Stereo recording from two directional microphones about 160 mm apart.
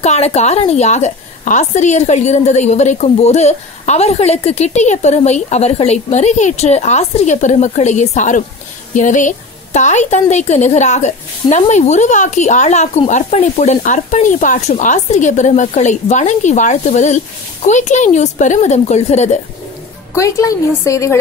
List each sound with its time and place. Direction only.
0.0 s a woman's voice: 40° left (ahead or behind)
20.2 s a woman's voice: 20° left (ahead or behind)